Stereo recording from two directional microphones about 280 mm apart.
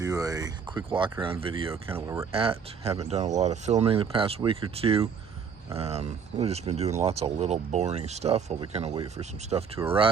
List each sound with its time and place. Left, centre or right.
0.0 s speech: centre